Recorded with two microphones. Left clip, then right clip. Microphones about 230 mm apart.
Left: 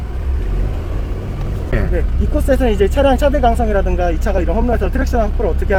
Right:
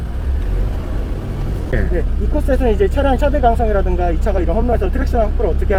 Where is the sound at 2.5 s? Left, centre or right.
Left.